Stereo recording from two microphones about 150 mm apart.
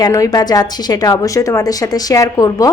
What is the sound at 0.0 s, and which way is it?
A woman's voice, 25° left (ahead or behind).